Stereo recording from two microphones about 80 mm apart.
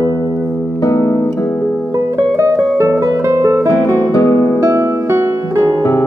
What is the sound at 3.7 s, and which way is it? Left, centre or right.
Music, left.